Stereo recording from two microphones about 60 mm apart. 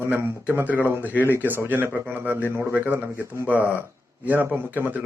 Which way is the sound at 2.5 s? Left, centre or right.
Right.